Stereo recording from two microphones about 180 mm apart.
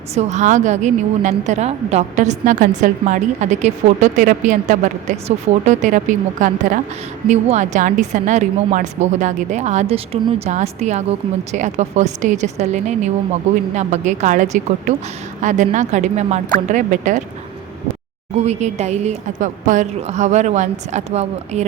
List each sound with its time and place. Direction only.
0.1 s a woman's voice: 40° right (ahead or behind)
18.4 s a woman's voice: 40° right (ahead or behind)